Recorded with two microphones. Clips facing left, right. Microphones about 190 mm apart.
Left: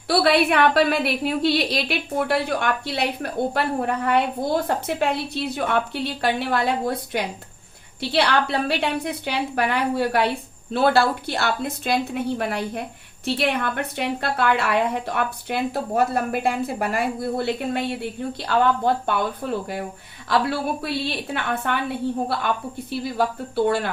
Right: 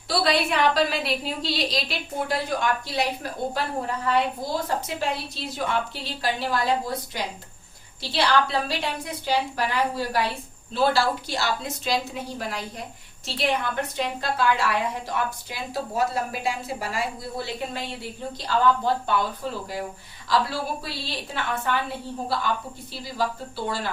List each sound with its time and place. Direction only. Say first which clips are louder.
0.1 s a woman's voice: left 5 dB; 60° left (ahead or behind)